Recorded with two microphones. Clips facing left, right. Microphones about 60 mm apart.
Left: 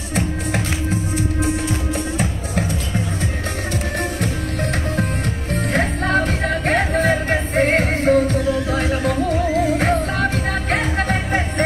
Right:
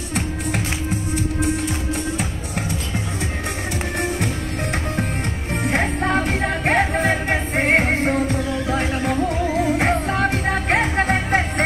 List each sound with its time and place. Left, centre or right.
5.5 s music: centre
7.6 s music: centre